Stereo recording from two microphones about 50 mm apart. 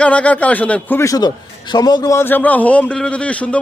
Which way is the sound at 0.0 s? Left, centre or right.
Left.